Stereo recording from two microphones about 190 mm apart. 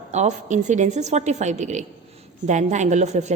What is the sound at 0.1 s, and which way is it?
A woman's voice, 35° right (ahead or behind).